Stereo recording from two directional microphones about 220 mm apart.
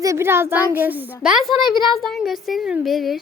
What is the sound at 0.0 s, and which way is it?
A child's voice, 15° right (ahead or behind).